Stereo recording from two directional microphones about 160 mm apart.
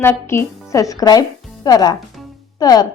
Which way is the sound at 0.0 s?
15° left (ahead or behind).